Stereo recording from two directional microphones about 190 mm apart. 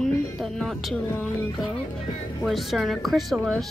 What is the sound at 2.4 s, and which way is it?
A woman's voice, centre (ahead or behind).